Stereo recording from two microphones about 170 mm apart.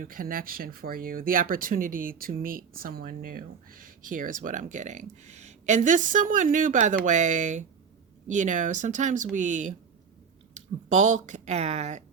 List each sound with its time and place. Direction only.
0.0 s a woman's voice: 55° right (ahead or behind)
10.8 s a woman's voice: 45° right (ahead or behind)